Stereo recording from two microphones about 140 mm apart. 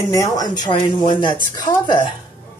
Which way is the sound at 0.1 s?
25° left (ahead or behind).